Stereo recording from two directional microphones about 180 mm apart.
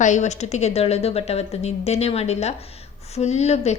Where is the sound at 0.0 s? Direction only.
40° left (ahead or behind).